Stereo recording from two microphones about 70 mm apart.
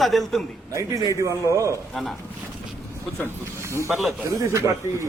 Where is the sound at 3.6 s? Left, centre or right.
Right.